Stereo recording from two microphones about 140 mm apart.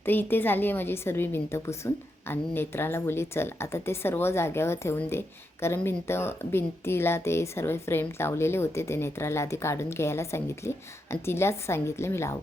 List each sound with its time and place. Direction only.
0.0 s a woman's voice: 15° left (ahead or behind)